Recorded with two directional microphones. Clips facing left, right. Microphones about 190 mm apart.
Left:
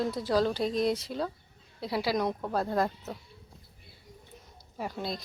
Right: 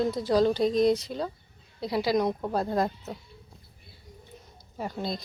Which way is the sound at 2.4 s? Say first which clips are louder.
Right 2 dB; 20° right (ahead or behind).